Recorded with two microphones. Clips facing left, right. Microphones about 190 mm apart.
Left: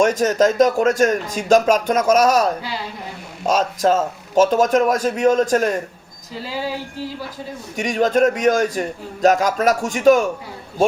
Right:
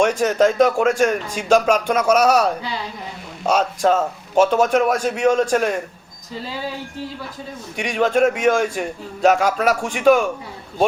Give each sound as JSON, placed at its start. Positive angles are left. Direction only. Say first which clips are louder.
{"t": 0.0, "sound": "speech", "louder": "left 1 dB", "side_deg": 40}
{"t": 3.5, "sound": "speech", "louder": "even", "side_deg": 40}
{"t": 7.8, "sound": "speech", "louder": "left 1 dB", "side_deg": 40}